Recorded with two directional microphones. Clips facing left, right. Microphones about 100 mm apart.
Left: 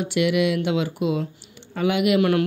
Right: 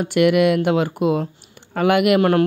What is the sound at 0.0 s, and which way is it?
Speech, 50° right (ahead or behind).